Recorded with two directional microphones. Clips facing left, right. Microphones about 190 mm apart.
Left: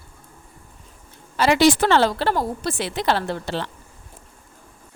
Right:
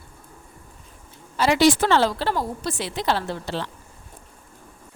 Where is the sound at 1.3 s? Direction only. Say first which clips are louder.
Left 1 dB; 70° left (ahead or behind).